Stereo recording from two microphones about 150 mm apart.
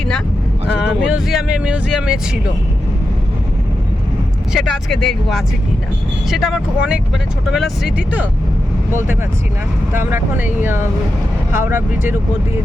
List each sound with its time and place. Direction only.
1.0 s speech: 5° right (ahead or behind)
4.5 s speech: centre (ahead or behind)